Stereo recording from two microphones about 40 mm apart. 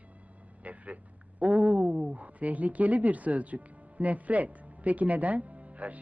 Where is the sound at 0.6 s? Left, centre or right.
Right.